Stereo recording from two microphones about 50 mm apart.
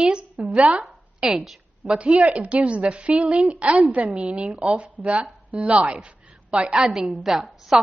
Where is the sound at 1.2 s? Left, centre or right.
Centre.